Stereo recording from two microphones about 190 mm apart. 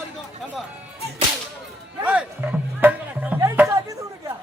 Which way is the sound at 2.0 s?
5° right (ahead or behind).